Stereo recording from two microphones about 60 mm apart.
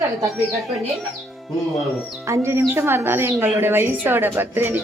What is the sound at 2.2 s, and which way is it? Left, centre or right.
Speech, right.